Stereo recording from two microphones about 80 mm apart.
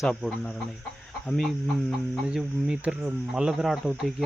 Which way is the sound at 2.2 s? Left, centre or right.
Centre.